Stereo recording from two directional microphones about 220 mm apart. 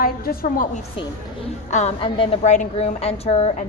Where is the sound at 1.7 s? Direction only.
30° left (ahead or behind).